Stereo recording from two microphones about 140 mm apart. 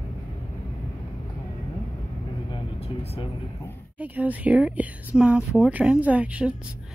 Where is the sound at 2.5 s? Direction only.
40° left (ahead or behind).